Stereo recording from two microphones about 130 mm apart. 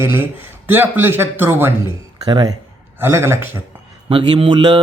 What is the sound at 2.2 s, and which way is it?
Speech, 30° right (ahead or behind).